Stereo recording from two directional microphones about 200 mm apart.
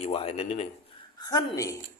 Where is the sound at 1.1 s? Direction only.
20° left (ahead or behind).